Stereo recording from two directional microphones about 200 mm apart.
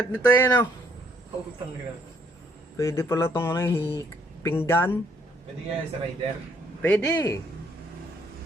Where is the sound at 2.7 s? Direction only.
15° left (ahead or behind).